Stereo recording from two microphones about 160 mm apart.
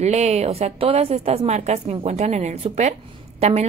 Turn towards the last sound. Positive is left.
turn(degrees=-40)  # may be behind; listen again after turning